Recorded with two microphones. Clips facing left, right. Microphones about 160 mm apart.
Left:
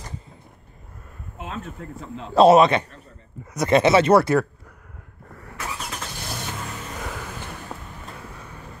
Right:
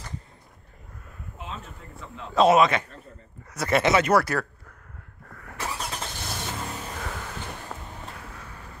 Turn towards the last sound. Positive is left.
turn(degrees=10)  # may be behind; listen again after turning